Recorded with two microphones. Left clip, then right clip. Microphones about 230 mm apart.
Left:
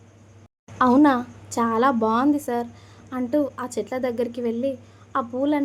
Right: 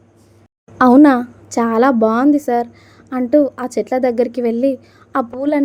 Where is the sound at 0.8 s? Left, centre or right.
Centre.